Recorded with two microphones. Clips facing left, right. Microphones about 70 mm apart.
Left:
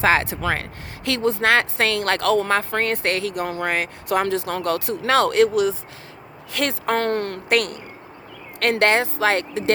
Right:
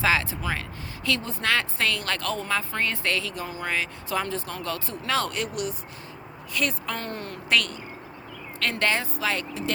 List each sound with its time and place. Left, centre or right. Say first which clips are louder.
0.0 s a woman's voice: left 5 dB; left
1.0 s a woman's voice: left 7 dB; left
6.5 s a woman's voice: left 6 dB; left
8.7 s a woman's voice: left 8 dB; left